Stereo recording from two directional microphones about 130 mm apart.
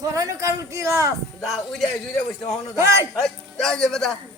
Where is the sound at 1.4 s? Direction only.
Centre (ahead or behind).